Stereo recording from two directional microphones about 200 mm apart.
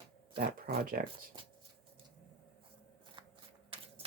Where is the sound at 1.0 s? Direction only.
45° right (ahead or behind).